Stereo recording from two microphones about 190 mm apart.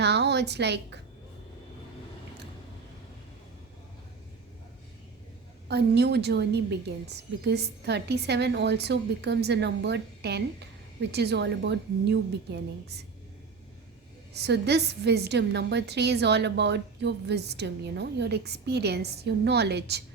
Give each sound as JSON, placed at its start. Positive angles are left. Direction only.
{"t": 0.0, "sound": "a sound", "side_deg": -60}
{"t": 5.6, "sound": "a woman's voice", "side_deg": -60}
{"t": 14.3, "sound": "a woman's voice", "side_deg": -60}